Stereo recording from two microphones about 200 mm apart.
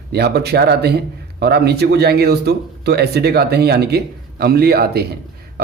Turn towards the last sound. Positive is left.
turn(degrees=-50)  # may be behind; listen again after turning